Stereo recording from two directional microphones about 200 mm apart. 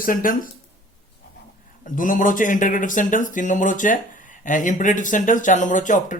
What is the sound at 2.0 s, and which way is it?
Speech, 40° left (ahead or behind).